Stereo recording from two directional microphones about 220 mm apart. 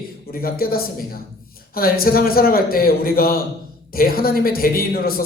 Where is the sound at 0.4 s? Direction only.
40° left (ahead or behind).